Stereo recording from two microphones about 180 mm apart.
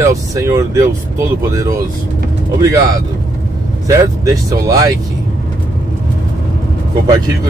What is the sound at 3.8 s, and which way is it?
Speech, 20° right (ahead or behind).